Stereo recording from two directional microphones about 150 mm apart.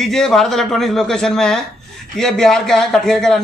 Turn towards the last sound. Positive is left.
turn(degrees=5)  # may be behind; listen again after turning